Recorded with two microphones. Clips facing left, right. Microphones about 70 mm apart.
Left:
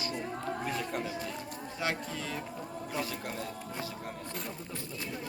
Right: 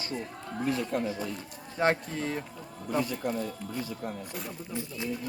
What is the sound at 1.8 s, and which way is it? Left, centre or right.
Speech, right.